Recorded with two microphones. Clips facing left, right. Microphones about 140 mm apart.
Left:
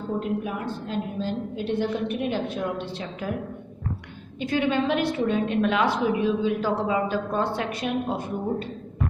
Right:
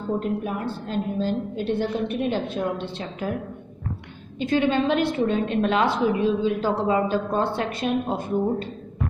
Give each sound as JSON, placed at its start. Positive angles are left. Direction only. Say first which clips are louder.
{"t": 0.2, "sound": "a woman's voice", "louder": "right 2 dB", "side_deg": -40}
{"t": 4.4, "sound": "a woman's voice", "louder": "right 2 dB", "side_deg": -25}